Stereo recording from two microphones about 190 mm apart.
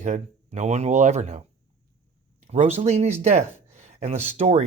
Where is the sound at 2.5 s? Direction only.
35° right (ahead or behind).